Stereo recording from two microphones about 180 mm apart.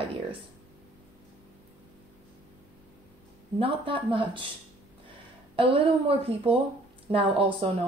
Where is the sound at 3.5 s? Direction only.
30° right (ahead or behind).